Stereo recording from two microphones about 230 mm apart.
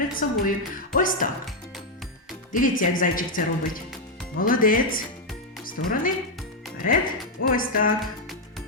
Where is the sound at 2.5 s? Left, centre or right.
Left.